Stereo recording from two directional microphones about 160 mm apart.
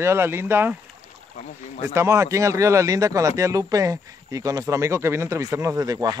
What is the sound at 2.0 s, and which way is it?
Speech, 15° right (ahead or behind).